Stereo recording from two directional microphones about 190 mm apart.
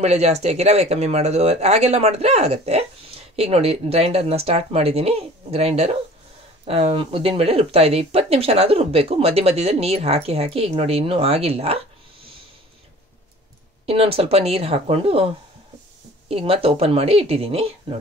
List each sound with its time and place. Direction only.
0.0 s speech: 35° right (ahead or behind)
13.8 s speech: 30° right (ahead or behind)